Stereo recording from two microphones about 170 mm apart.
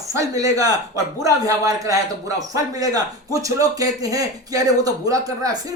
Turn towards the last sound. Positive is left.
turn(degrees=-20)  # may be behind; listen again after turning